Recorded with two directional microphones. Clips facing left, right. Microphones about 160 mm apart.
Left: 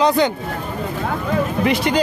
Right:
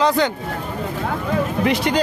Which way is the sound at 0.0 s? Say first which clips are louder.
Left 2 dB; 15° left (ahead or behind).